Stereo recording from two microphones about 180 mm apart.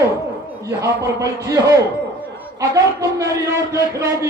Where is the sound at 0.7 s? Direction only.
15° right (ahead or behind).